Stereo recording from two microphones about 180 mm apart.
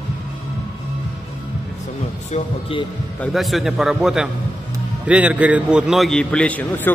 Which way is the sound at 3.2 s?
Centre (ahead or behind).